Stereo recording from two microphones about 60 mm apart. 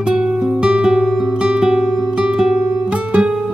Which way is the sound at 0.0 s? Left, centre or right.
Centre.